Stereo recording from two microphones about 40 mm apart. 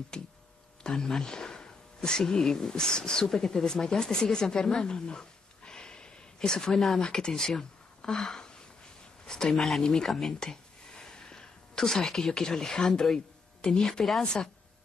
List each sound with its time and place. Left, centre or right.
0.1 s speech: centre
6.7 s speech: centre
7.0 s speech: centre
10.4 s a sound: centre
13.7 s speech: centre